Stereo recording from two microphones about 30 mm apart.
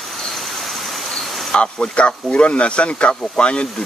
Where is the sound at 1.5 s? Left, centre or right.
Left.